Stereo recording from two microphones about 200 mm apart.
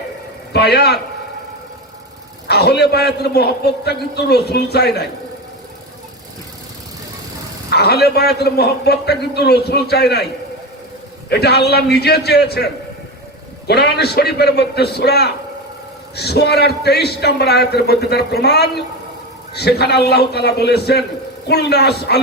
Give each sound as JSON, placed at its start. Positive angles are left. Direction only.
{"t": 0.5, "sound": "a man's voice", "side_deg": 55}
{"t": 2.5, "sound": "a man's voice", "side_deg": 55}
{"t": 7.7, "sound": "a man's voice", "side_deg": 55}
{"t": 11.3, "sound": "a man's voice", "side_deg": 55}
{"t": 13.7, "sound": "a man's voice", "side_deg": 55}